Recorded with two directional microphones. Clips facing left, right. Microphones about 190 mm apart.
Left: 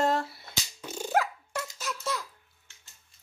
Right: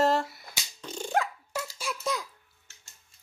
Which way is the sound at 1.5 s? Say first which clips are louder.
Right 1 dB; 10° right (ahead or behind).